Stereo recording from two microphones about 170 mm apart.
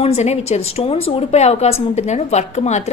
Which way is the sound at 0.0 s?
40° left (ahead or behind).